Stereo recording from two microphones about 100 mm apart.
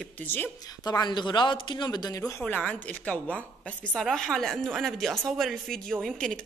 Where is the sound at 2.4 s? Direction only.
15° left (ahead or behind).